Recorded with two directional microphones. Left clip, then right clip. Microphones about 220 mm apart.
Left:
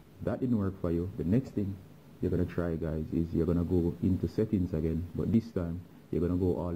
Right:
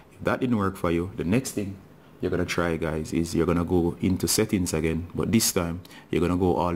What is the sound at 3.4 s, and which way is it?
Speech, 25° right (ahead or behind).